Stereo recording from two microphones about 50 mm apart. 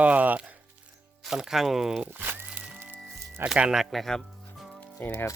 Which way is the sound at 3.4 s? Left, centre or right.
Right.